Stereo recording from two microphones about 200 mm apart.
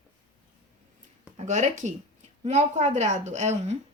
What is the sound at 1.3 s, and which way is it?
Speech, 35° right (ahead or behind).